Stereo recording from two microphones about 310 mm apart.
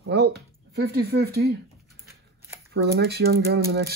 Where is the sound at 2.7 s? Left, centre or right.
Right.